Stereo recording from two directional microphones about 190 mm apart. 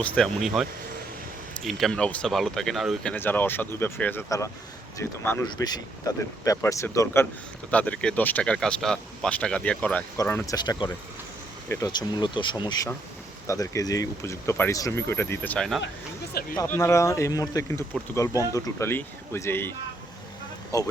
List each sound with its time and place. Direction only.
0.0 s speech: centre (ahead or behind)
16.6 s speech: 15° left (ahead or behind)
20.7 s speech: 20° left (ahead or behind)